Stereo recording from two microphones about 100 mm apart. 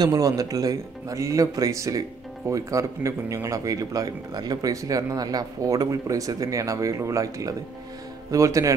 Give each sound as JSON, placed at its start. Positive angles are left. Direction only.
{"t": 0.0, "sound": "a man's voice", "side_deg": -40}